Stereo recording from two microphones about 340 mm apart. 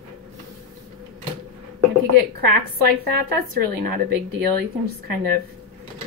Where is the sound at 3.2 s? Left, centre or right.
Right.